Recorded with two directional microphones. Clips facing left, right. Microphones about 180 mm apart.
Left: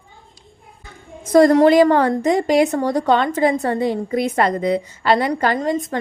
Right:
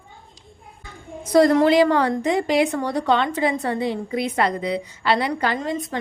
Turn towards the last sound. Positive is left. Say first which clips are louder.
# left 5 dB
turn(degrees=45)  # may be behind; listen again after turning